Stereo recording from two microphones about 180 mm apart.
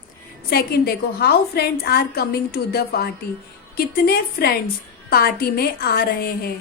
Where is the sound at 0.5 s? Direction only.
60° left (ahead or behind).